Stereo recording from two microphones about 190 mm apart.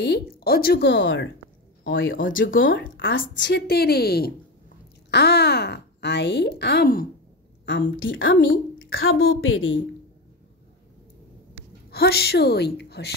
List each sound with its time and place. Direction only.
0.0 s speech: 60° left (ahead or behind)
1.9 s speech: 90° left
2.1 s speech: 45° left (ahead or behind)
2.7 s speech: 80° left; by 7.1 s 55° left (ahead or behind)
7.6 s a woman's voice: 75° left (ahead or behind); by 9.8 s 90° left
11.9 s speech: 55° left (ahead or behind)